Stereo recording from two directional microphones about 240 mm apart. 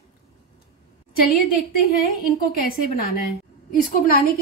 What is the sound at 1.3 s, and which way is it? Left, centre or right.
A woman's voice, left.